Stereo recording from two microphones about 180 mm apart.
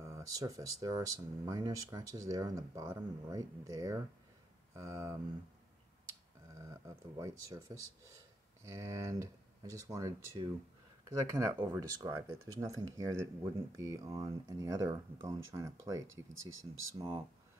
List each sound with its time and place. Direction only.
0.0 s speech: 20° right (ahead or behind)
6.6 s speech: 15° right (ahead or behind)
16.1 s speech: 90° right